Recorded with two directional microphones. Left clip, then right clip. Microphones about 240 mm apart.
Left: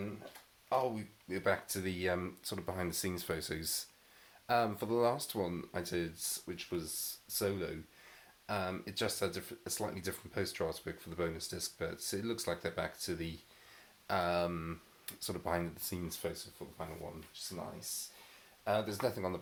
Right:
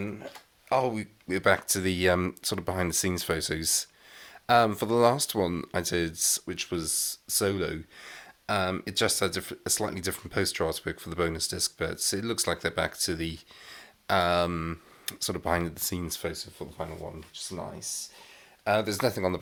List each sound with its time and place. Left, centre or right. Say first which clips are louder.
0.7 s speech: right 8 dB; right